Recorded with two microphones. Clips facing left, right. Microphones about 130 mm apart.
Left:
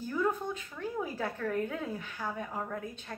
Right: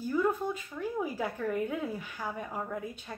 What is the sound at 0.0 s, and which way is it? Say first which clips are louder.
Speech: right 2 dB; 10° right (ahead or behind).